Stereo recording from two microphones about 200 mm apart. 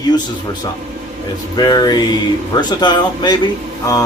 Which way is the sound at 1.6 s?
20° left (ahead or behind).